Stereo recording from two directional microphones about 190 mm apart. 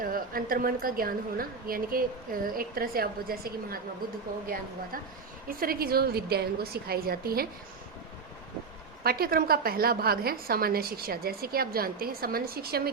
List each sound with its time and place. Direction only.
0.0 s a woman's voice: 50° right (ahead or behind)
5.5 s a woman's voice: 50° right (ahead or behind)
9.0 s a woman's voice: 50° right (ahead or behind)